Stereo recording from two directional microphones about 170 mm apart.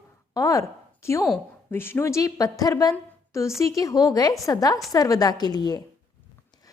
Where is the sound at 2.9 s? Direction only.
15° left (ahead or behind).